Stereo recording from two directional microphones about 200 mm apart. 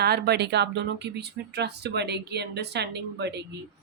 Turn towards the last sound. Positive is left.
turn(degrees=-60)  # may be behind; listen again after turning